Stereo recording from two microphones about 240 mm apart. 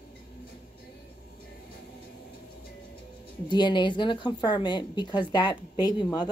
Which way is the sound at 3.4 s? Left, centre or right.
Centre.